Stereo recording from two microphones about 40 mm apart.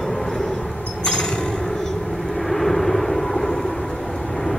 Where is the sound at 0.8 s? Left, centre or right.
Centre.